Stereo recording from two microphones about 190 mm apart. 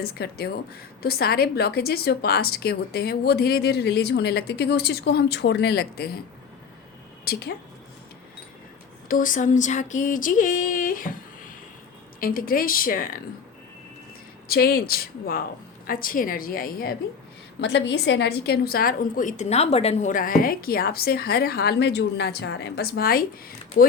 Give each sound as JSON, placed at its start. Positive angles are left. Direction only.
{"t": 0.0, "sound": "a woman's voice", "side_deg": 55}
{"t": 7.3, "sound": "a woman's voice", "side_deg": 55}
{"t": 9.0, "sound": "a woman's voice", "side_deg": 45}
{"t": 12.2, "sound": "a woman's voice", "side_deg": 50}
{"t": 14.4, "sound": "a woman's voice", "side_deg": 55}
{"t": 17.6, "sound": "a woman's voice", "side_deg": 70}